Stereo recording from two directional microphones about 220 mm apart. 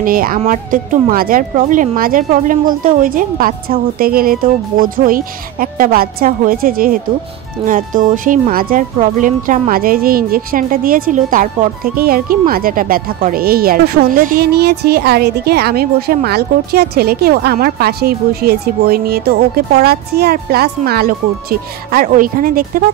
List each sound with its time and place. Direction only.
0.0 s speech: 40° right (ahead or behind)